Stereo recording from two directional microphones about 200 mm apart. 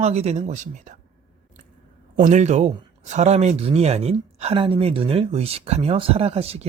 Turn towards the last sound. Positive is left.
turn(degrees=-30)  # may be behind; listen again after turning